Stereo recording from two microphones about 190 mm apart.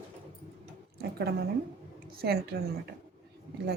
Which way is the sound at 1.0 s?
55° right (ahead or behind).